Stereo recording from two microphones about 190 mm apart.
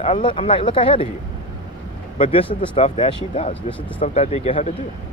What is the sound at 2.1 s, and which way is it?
Speech, 30° left (ahead or behind).